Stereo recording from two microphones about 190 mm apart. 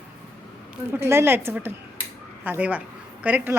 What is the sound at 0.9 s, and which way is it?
A woman's voice, 10° right (ahead or behind).